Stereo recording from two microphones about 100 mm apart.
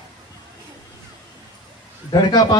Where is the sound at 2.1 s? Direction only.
45° left (ahead or behind).